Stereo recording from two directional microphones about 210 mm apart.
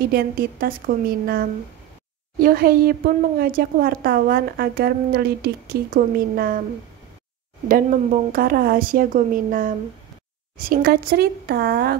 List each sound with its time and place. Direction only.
0.1 s a woman's voice: 45° right (ahead or behind)
8.3 s a woman's voice: 45° right (ahead or behind)